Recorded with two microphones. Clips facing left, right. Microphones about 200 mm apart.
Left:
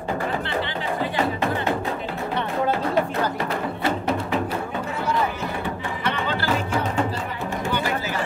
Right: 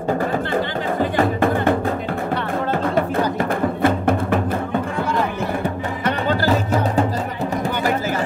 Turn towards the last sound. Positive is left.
turn(degrees=-40)  # may be behind; listen again after turning